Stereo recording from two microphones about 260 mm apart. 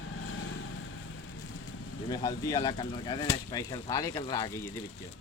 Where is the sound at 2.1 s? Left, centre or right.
Centre.